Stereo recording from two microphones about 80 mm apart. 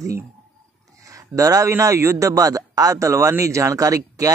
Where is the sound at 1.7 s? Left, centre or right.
Right.